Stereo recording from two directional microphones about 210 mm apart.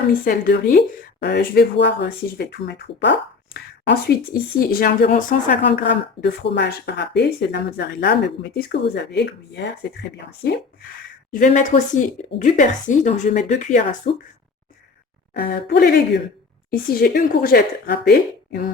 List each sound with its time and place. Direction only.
0.1 s speech: 45° left (ahead or behind)
5.6 s speech: 55° left (ahead or behind)
10.9 s a woman's voice: 40° left (ahead or behind)
15.3 s speech: 50° left (ahead or behind)